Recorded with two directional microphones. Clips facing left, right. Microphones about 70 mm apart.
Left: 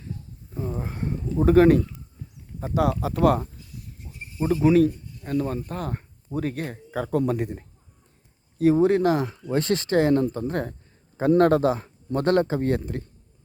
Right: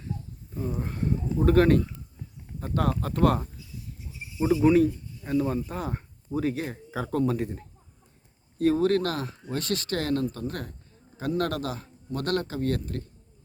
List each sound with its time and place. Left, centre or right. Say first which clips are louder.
0.9 s speech: left 2 dB; centre
3.6 s insect: even; left
4.6 s speech: left 3 dB; centre
8.7 s a man's voice: left 7 dB; centre